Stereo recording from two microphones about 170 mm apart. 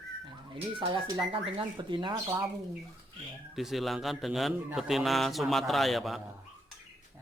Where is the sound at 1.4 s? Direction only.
30° right (ahead or behind).